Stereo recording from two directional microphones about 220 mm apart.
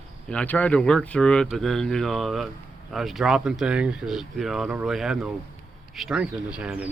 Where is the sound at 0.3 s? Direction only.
5° left (ahead or behind).